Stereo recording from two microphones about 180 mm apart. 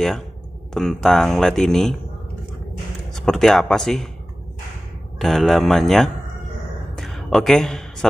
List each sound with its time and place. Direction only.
0.7 s speech: centre (ahead or behind)
3.1 s speech: centre (ahead or behind)
5.2 s speech: centre (ahead or behind)
7.0 s a sound: centre (ahead or behind)